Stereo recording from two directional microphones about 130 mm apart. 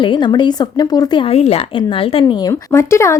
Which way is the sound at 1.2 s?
50° left (ahead or behind).